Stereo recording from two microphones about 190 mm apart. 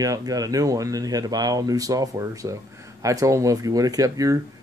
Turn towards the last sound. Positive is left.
turn(degrees=-15)  # may be behind; listen again after turning